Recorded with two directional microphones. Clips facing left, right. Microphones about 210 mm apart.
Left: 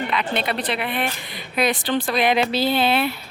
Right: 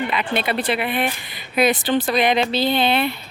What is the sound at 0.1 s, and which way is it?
A woman's voice, 5° right (ahead or behind).